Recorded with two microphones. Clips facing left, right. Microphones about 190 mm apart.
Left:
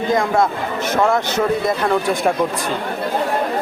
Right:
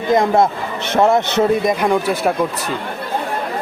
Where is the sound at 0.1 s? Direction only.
20° right (ahead or behind).